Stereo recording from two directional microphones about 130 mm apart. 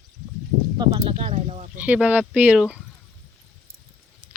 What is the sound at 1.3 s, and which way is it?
Speech, 60° right (ahead or behind).